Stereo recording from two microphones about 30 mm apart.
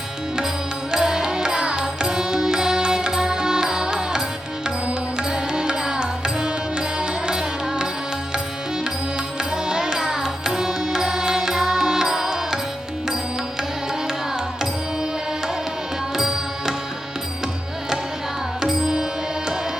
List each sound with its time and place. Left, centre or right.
0.9 s music: right
5.3 s music: right
9.4 s music: right
16.1 s music: centre
18.6 s music: centre